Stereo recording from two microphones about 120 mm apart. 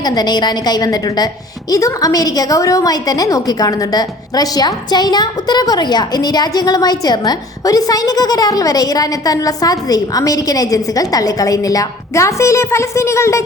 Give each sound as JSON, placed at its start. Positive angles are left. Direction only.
{"t": 0.0, "sound": "a woman's voice", "side_deg": 35}